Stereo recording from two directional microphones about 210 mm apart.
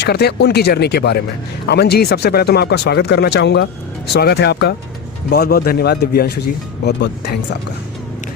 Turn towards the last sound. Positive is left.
turn(degrees=50)  # may be behind; listen again after turning